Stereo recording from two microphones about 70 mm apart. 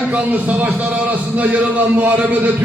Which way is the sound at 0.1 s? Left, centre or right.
Right.